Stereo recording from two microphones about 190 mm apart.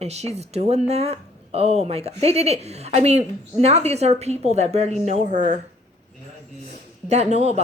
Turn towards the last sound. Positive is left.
turn(degrees=-35)  # may be behind; listen again after turning